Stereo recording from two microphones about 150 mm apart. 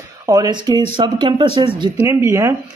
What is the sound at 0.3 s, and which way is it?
Speech, 25° right (ahead or behind).